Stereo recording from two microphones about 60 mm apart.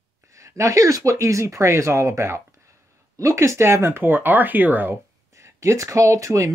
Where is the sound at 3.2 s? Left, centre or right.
Right.